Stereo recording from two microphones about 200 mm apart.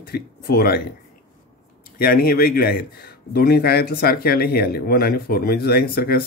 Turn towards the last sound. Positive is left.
turn(degrees=50)  # may be behind; listen again after turning